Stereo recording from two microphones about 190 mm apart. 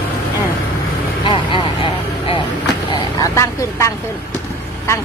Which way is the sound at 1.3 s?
25° left (ahead or behind).